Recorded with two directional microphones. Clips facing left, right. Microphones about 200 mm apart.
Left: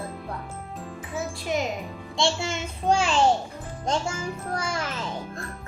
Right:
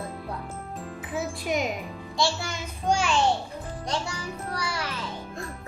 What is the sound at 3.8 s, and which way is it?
A child's voice, 45° left (ahead or behind).